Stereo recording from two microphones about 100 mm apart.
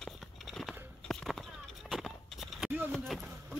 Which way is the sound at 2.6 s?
20° right (ahead or behind).